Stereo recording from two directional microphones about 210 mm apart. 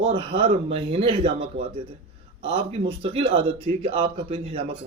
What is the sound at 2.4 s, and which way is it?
Speech, 25° right (ahead or behind).